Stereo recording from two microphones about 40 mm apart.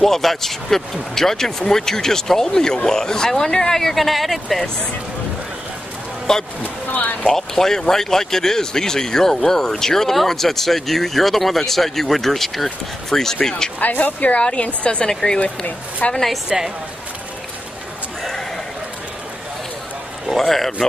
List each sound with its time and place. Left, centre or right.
0.0 s speech: centre
6.3 s speech: centre
6.6 s speech: left
7.2 s speech: centre
13.7 s speech: left
14.4 s a woman's voice: left
15.0 s speech: centre
15.4 s speech: left
16.4 s a woman's voice: centre
20.2 s a man's voice: centre